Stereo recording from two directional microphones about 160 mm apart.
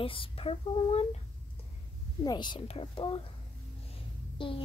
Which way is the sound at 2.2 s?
25° left (ahead or behind).